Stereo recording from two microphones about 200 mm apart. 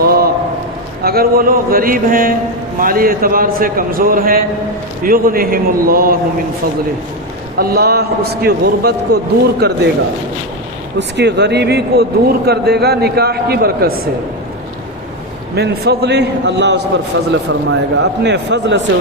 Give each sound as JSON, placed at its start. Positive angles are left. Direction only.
{"t": 0.0, "sound": "a sound", "side_deg": -50}
{"t": 1.0, "sound": "speech", "side_deg": -50}
{"t": 7.6, "sound": "speech", "side_deg": -50}
{"t": 10.9, "sound": "speech", "side_deg": -60}
{"t": 15.5, "sound": "a man's voice", "side_deg": -55}
{"t": 17.1, "sound": "speech", "side_deg": -70}
{"t": 17.7, "sound": "a man's voice", "side_deg": -60}